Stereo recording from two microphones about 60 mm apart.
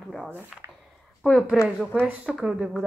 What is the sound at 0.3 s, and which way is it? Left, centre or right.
Speech, right.